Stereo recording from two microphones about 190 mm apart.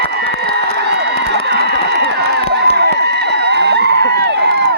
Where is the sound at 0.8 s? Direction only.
60° right (ahead or behind).